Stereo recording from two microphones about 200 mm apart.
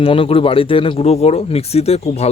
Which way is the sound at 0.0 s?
30° left (ahead or behind).